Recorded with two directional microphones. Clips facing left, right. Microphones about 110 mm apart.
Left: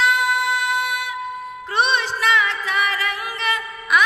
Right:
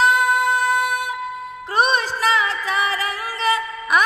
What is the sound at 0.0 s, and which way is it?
Music, 40° right (ahead or behind).